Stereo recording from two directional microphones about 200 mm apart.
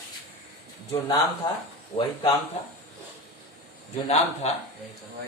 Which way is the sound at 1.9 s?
30° left (ahead or behind).